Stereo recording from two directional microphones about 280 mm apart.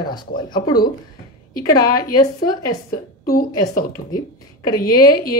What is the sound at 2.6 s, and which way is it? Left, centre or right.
Speech, left.